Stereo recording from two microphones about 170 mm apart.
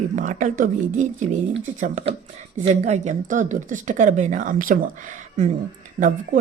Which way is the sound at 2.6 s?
40° right (ahead or behind).